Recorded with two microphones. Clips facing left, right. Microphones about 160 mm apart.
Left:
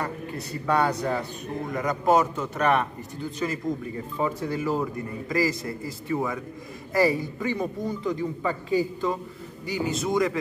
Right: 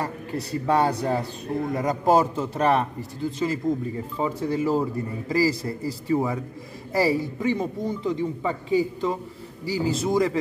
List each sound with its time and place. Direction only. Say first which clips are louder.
0.0 s a man's voice: right 2 dB; 30° right (ahead or behind)